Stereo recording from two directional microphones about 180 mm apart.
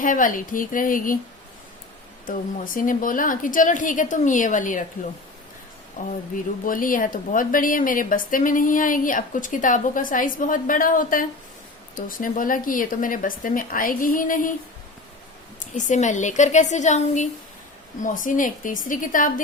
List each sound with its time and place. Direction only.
0.0 s a woman's voice: 50° left (ahead or behind)
2.2 s a woman's voice: 50° left (ahead or behind)
6.0 s a woman's voice: 45° left (ahead or behind)
15.7 s a woman's voice: 45° left (ahead or behind)